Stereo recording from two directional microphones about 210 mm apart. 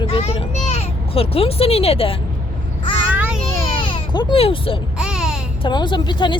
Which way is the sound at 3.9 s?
20° left (ahead or behind).